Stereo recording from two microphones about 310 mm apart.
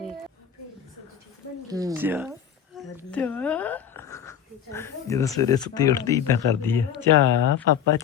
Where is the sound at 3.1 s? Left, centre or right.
Centre.